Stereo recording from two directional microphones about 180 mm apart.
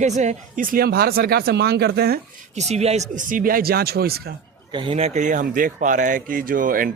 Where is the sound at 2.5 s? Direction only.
35° right (ahead or behind); by 4.3 s 60° right (ahead or behind).